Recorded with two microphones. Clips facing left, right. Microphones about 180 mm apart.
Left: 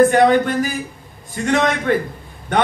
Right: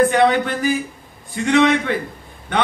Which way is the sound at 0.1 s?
45° left (ahead or behind).